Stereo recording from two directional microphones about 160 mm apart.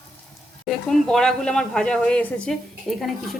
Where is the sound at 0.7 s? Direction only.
5° left (ahead or behind).